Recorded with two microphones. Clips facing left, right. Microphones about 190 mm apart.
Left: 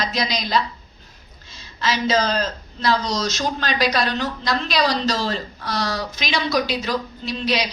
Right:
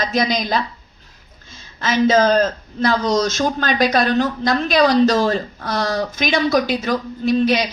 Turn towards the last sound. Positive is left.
turn(degrees=-50)  # may be behind; listen again after turning